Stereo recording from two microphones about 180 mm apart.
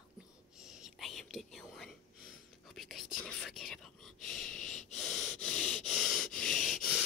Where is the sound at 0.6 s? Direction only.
5° right (ahead or behind).